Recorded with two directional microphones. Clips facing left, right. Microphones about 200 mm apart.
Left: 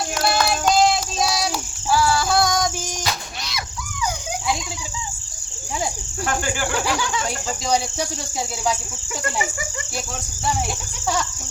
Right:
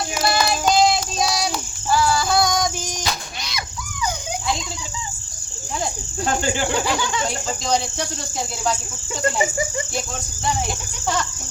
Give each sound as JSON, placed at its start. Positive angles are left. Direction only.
{"t": 0.2, "sound": "a sound", "side_deg": 5}
{"t": 6.2, "sound": "speech", "side_deg": -25}
{"t": 6.7, "sound": "speech", "side_deg": 5}